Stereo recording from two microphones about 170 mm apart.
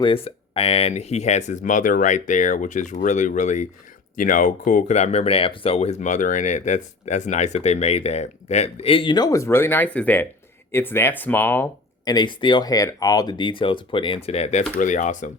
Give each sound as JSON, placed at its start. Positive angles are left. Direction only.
{"t": 0.0, "sound": "speech", "side_deg": 35}
{"t": 12.0, "sound": "speech", "side_deg": 25}
{"t": 14.8, "sound": "speech", "side_deg": 45}